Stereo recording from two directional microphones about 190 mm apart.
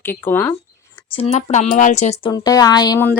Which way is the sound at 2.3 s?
20° left (ahead or behind).